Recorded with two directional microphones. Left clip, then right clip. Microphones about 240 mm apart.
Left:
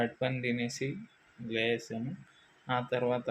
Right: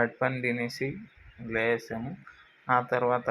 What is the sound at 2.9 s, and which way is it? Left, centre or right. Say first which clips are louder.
Speech: right 5 dB; centre.